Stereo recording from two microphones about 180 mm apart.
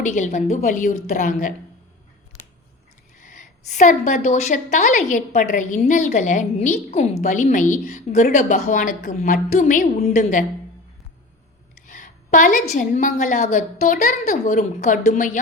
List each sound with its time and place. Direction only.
0.0 s a woman's voice: 40° left (ahead or behind)
3.2 s a woman's voice: 45° left (ahead or behind)
11.9 s a woman's voice: 45° left (ahead or behind)